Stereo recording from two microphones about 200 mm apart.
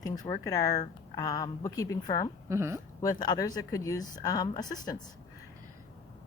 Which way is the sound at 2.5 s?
15° right (ahead or behind).